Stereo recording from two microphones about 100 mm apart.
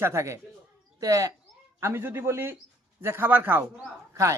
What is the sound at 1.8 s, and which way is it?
A man's voice, 25° right (ahead or behind).